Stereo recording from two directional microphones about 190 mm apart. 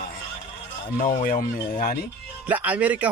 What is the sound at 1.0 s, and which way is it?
Speech, 45° left (ahead or behind).